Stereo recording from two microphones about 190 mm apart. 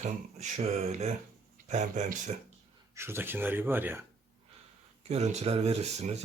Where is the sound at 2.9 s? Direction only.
15° right (ahead or behind).